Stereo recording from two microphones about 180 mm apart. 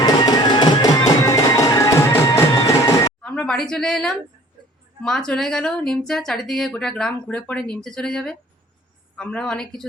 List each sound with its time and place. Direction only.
0.0 s music: 25° left (ahead or behind)
3.2 s speech: 5° left (ahead or behind)